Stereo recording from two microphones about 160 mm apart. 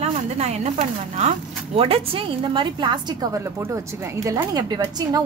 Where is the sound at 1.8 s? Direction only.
35° right (ahead or behind).